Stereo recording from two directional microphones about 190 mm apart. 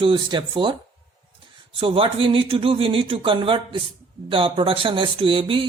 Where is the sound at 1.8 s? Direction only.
30° right (ahead or behind).